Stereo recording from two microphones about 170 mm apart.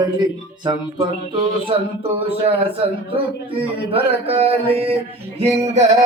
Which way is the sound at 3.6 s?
35° right (ahead or behind).